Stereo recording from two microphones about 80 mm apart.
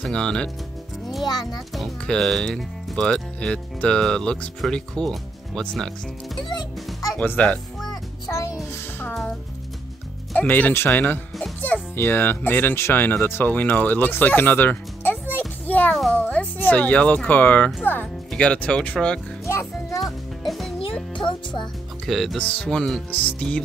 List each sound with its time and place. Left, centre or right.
0.0 s speech: centre
1.2 s a child's voice: left
1.7 s speech: centre
7.2 s speech: centre
10.3 s speech: left
15.9 s a sound: centre
16.3 s a sound: centre
17.3 s speech: left
20.4 s music: centre
21.1 s music: left
22.0 s speech: centre
22.4 s speech: centre